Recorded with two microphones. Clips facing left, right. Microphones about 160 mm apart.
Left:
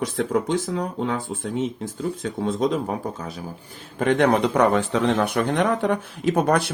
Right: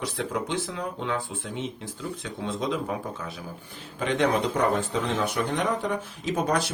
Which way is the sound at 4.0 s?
55° left (ahead or behind).